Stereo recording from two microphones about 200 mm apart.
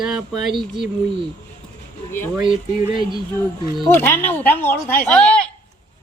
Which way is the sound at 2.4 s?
25° right (ahead or behind).